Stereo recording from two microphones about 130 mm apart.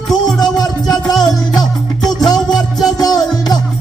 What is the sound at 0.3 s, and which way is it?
Music, 30° left (ahead or behind).